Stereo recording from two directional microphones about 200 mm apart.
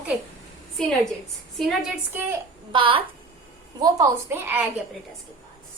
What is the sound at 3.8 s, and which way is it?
Speech, 15° right (ahead or behind).